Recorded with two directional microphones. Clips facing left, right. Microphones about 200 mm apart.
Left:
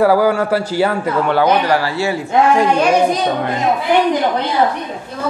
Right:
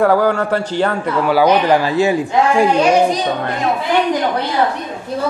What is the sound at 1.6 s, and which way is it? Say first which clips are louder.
Speech: right 3 dB; 20° right (ahead or behind).